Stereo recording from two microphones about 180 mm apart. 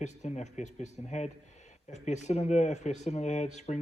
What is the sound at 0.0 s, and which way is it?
Speech, 40° left (ahead or behind).